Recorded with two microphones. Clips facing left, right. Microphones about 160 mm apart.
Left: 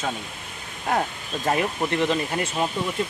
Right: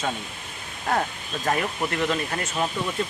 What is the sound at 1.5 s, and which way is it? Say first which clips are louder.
Speech: left 3 dB; 20° left (ahead or behind).